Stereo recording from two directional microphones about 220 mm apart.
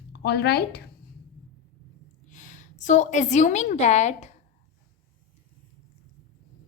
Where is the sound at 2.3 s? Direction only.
35° left (ahead or behind).